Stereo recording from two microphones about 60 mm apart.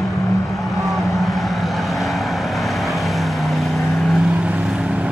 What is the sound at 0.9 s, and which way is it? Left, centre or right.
Vehicle, centre.